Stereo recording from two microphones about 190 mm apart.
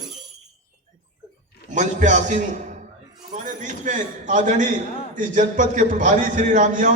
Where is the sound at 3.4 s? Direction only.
40° right (ahead or behind).